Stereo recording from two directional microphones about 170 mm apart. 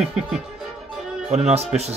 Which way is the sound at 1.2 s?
40° right (ahead or behind).